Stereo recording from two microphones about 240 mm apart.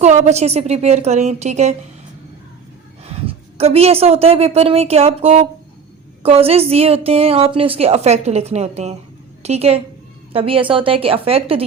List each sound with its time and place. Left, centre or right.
0.0 s a woman's voice: right
3.0 s a woman's voice: right